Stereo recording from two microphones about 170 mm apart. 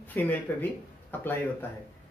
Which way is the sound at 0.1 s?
10° left (ahead or behind).